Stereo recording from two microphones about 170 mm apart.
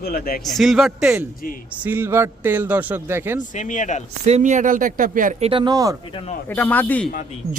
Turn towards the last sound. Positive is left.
turn(degrees=10)  # may be behind; listen again after turning